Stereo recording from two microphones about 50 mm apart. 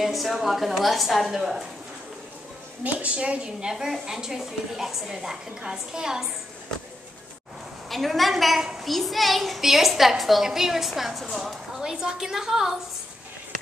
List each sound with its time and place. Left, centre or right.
0.0 s a woman's voice: centre
2.8 s a woman's voice: right
3.7 s a woman's voice: centre
7.9 s a woman's voice: centre